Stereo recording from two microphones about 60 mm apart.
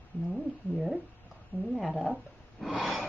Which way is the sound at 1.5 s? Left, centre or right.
Left.